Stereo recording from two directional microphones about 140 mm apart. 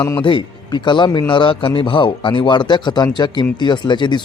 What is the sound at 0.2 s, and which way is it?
Speech, 35° left (ahead or behind).